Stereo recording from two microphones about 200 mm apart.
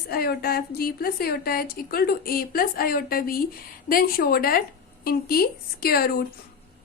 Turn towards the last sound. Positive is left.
turn(degrees=50)  # may be behind; listen again after turning